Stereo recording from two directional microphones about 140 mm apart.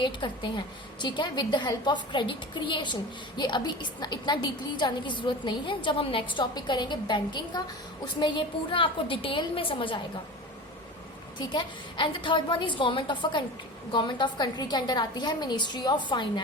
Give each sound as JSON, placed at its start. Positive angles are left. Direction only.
{"t": 0.0, "sound": "a woman's voice", "side_deg": 35}
{"t": 11.3, "sound": "a woman's voice", "side_deg": 35}